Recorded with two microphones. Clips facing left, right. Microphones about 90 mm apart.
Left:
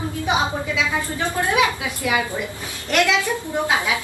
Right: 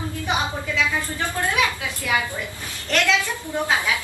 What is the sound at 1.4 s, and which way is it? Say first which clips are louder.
A woman's voice: left 3 dB; 20° left (ahead or behind).